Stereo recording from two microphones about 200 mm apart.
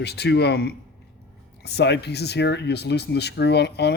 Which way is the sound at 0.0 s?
55° left (ahead or behind).